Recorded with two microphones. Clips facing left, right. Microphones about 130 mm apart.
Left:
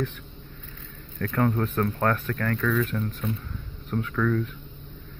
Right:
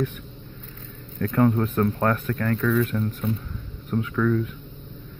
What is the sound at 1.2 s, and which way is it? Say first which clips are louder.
Speech: right 4 dB; 15° right (ahead or behind).